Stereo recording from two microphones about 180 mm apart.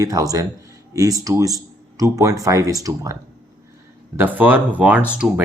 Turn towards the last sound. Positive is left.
turn(degrees=-5)  # may be behind; listen again after turning